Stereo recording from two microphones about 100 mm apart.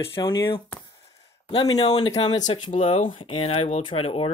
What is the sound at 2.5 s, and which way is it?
Speech, 90° left.